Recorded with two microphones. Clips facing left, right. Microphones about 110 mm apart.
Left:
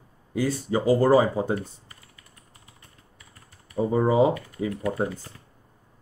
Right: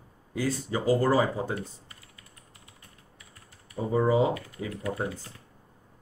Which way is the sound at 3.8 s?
50° left (ahead or behind).